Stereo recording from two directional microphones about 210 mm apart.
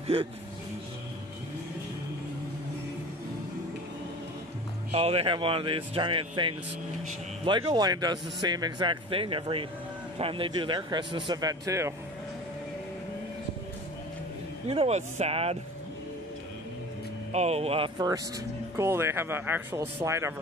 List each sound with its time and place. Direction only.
0.0 s speech: 25° right (ahead or behind)
4.9 s a man's voice: 30° right (ahead or behind)
14.7 s a man's voice: 30° right (ahead or behind)
17.3 s a man's voice: 30° right (ahead or behind); by 20.3 s 15° right (ahead or behind)